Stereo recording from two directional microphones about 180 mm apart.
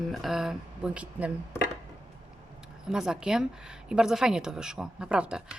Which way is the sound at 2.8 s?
5° right (ahead or behind).